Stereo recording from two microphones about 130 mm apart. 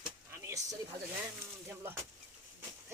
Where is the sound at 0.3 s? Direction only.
20° right (ahead or behind).